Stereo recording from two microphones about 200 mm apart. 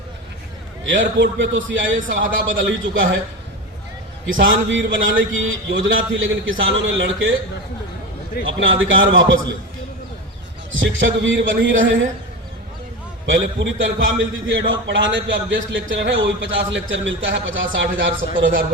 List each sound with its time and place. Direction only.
0.9 s a man's voice: 65° right (ahead or behind)
4.3 s a man's voice: 70° right (ahead or behind)
8.4 s a man's voice: 70° right (ahead or behind)
10.7 s a man's voice: 70° right (ahead or behind)
13.2 s a man's voice: 70° right (ahead or behind)